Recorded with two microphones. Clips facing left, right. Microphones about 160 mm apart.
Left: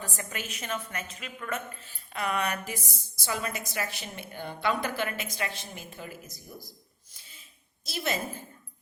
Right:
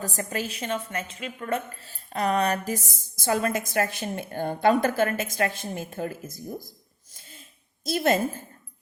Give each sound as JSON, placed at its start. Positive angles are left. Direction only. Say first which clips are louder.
{"t": 0.0, "sound": "a woman's voice", "louder": "right 7 dB", "side_deg": -40}
{"t": 7.9, "sound": "a woman's voice", "louder": "right 9 dB", "side_deg": -50}